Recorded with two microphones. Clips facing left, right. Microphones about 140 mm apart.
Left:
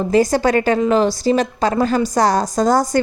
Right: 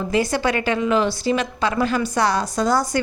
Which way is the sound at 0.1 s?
40° left (ahead or behind).